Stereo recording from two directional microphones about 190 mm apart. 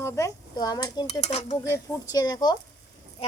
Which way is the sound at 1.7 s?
20° left (ahead or behind).